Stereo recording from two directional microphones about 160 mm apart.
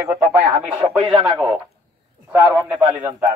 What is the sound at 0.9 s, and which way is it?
Speech, 30° right (ahead or behind).